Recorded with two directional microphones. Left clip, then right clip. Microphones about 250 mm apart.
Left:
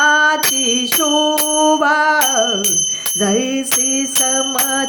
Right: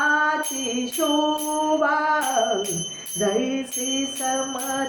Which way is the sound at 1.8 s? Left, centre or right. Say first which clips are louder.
Left 7 dB; left.